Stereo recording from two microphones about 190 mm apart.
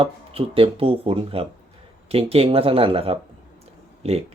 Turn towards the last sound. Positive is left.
turn(degrees=-35)  # may be behind; listen again after turning